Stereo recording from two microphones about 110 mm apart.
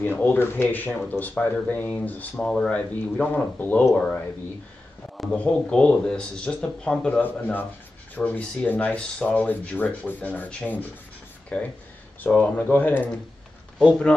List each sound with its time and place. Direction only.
0.0 s speech: 20° left (ahead or behind)